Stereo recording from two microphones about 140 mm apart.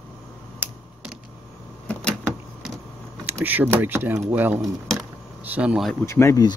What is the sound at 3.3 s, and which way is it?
Speech, 15° right (ahead or behind).